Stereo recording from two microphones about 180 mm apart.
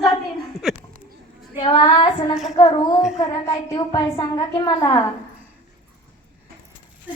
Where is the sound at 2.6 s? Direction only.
25° left (ahead or behind).